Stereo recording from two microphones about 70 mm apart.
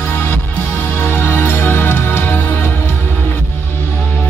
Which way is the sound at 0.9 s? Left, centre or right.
Left.